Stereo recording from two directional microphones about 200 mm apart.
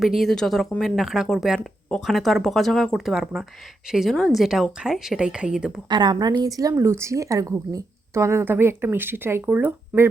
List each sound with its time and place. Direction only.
0.0 s speech: centre (ahead or behind)
5.9 s a woman's voice: 20° right (ahead or behind)